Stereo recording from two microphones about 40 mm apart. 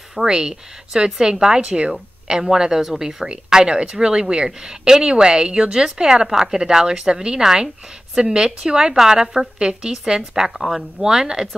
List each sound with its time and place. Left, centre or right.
0.3 s a woman's voice: centre